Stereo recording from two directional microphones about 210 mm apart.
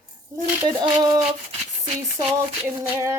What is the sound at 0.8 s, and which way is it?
Speech, 20° right (ahead or behind).